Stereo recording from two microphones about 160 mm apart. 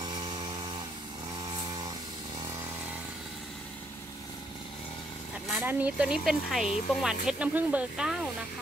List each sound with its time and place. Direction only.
0.0 s chainsaw: 25° right (ahead or behind)
1.5 s chainsaw: 25° right (ahead or behind)
5.5 s speech: 10° right (ahead or behind)